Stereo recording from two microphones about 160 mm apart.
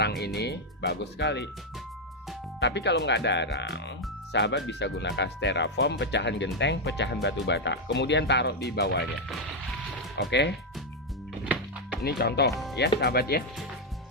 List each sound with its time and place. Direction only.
0.0 s music: 90° left
0.3 s speech: 90° left
2.6 s speech: 90° left
10.2 s speech: 90° left
12.0 s speech: 90° left